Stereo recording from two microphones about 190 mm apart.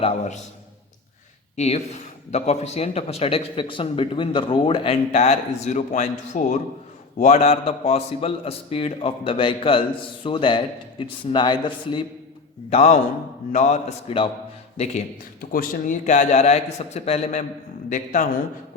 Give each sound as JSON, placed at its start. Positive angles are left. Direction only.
{"t": 1.5, "sound": "a man's voice", "side_deg": 35}
{"t": 12.7, "sound": "a man's voice", "side_deg": 35}
{"t": 15.4, "sound": "a man's voice", "side_deg": 50}